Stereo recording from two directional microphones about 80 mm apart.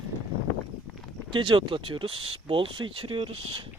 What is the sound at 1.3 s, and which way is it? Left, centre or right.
Speech, right.